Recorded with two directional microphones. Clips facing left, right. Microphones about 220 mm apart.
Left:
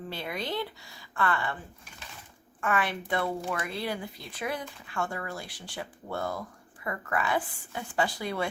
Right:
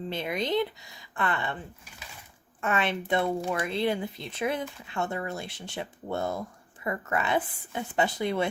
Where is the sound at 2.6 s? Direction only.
25° right (ahead or behind).